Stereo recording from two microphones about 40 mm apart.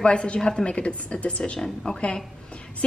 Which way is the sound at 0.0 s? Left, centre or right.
Left.